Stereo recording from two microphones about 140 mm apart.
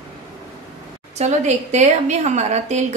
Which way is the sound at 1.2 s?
55° right (ahead or behind).